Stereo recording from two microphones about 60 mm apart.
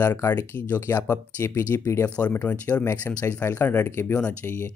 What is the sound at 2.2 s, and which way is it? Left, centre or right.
Speech, left.